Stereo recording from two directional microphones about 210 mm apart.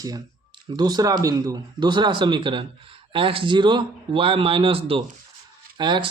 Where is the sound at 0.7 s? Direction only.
20° right (ahead or behind).